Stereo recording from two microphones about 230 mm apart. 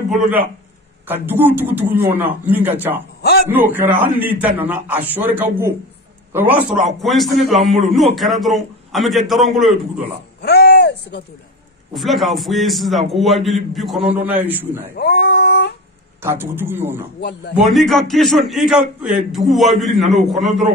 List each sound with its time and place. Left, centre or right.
1.0 s a man's voice: centre
3.2 s a sound: left
3.4 s a man's voice: centre
10.4 s a sound: left
11.9 s a man's voice: centre
15.0 s cat: left
16.2 s a man's voice: centre
17.2 s a man's voice: left
17.6 s a man's voice: centre